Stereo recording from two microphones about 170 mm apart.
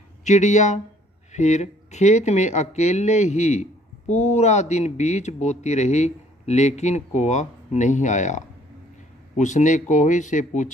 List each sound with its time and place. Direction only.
0.3 s speech: 45° left (ahead or behind)